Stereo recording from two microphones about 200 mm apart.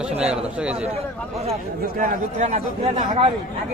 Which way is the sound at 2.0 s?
35° right (ahead or behind).